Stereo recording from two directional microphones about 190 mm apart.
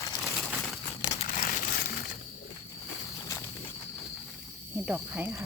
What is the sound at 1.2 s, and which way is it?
Crumpling, 40° left (ahead or behind).